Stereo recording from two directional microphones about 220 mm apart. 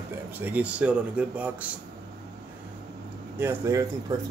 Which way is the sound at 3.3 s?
10° right (ahead or behind).